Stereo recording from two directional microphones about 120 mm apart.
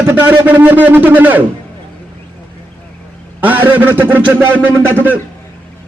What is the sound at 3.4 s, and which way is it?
A man's voice, 15° right (ahead or behind).